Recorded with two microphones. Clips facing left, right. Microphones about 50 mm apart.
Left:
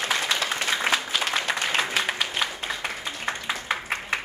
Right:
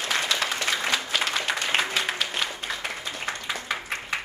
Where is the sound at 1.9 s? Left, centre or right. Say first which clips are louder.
Left 1 dB; centre.